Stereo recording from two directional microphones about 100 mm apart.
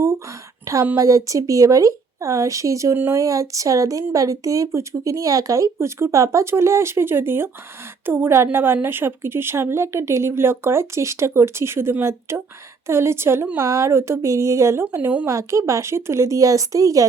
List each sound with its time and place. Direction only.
0.6 s a woman's voice: 35° right (ahead or behind); by 15.3 s 20° right (ahead or behind)
15.3 s speech: 30° right (ahead or behind)